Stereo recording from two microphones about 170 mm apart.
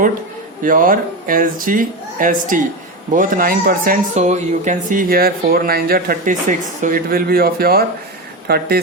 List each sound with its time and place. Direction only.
0.6 s speech: 55° right (ahead or behind)